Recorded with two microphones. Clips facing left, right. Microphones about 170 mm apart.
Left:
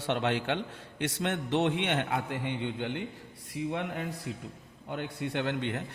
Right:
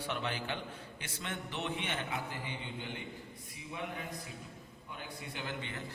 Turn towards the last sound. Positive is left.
turn(degrees=70)  # may be behind; listen again after turning